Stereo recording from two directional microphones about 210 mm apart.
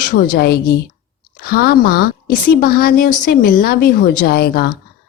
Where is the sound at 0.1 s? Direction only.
45° left (ahead or behind).